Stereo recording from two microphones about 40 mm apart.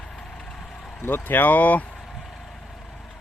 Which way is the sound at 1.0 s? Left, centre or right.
Left.